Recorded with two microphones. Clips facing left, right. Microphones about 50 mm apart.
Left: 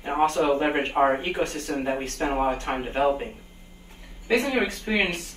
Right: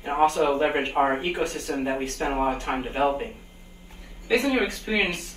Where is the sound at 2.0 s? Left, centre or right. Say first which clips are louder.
Even; left.